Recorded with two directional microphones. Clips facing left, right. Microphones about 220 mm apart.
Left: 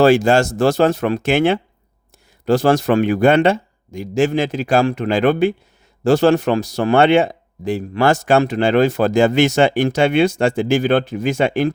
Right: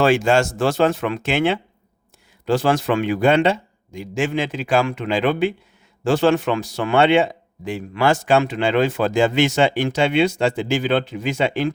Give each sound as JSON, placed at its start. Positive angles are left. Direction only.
{"t": 0.0, "sound": "a man's voice", "side_deg": 40}